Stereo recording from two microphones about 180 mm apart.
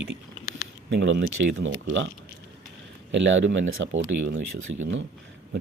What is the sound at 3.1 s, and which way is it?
Speech, 85° right.